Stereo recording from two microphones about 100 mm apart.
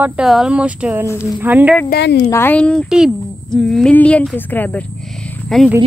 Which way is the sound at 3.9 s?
15° left (ahead or behind).